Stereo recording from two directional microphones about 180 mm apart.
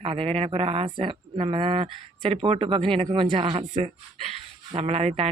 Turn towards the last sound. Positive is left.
turn(degrees=-35)  # may be behind; listen again after turning